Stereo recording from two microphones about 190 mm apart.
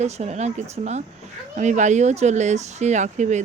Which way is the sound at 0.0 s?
35° right (ahead or behind).